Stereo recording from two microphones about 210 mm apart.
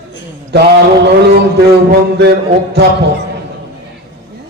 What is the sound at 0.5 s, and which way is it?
Speech, 50° right (ahead or behind).